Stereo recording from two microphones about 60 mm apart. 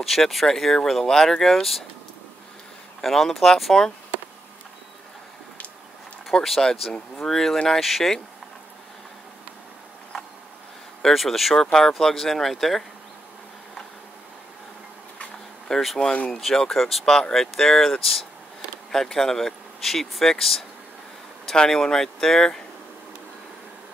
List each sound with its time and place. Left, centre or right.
0.0 s speech: centre
3.0 s speech: centre
6.3 s speech: centre
11.0 s speech: centre
15.7 s speech: centre
16.0 s speech: centre
16.3 s speech: centre